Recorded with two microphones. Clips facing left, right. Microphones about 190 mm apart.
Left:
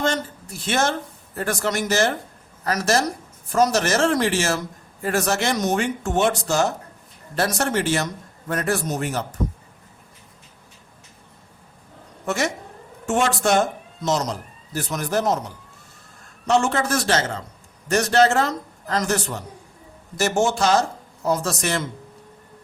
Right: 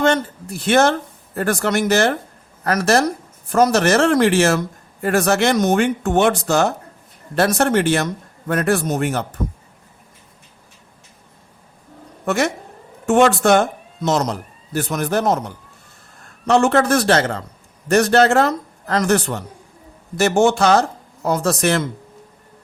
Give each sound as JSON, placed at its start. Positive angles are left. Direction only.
{"t": 0.6, "sound": "speech", "side_deg": -60}
{"t": 12.2, "sound": "a man's voice", "side_deg": -60}